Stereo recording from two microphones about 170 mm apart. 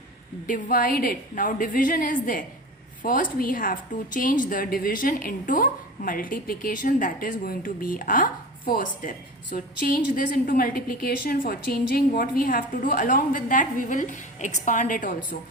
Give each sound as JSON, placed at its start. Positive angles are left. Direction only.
{"t": 0.4, "sound": "a woman's voice", "side_deg": 55}